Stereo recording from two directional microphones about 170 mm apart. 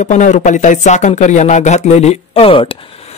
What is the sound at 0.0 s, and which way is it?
Speech, 45° left (ahead or behind).